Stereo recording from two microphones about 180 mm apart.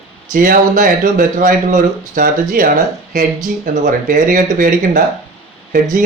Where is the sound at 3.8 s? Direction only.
45° right (ahead or behind).